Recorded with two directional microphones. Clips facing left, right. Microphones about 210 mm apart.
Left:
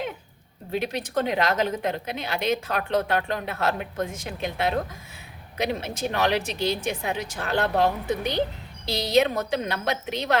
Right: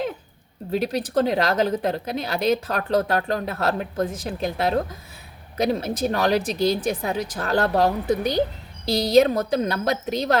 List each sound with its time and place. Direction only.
0.7 s a woman's voice: 35° right (ahead or behind)